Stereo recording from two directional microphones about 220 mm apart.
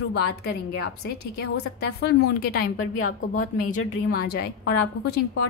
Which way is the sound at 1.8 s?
45° left (ahead or behind).